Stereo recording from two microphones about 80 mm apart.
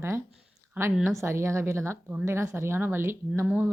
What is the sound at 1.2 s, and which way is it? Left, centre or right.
Speech, right.